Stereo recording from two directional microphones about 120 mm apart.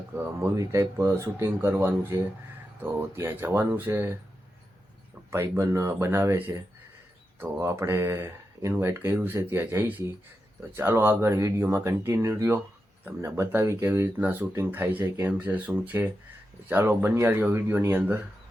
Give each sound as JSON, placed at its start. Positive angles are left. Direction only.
{"t": 0.5, "sound": "speech", "side_deg": -25}
{"t": 5.3, "sound": "speech", "side_deg": -25}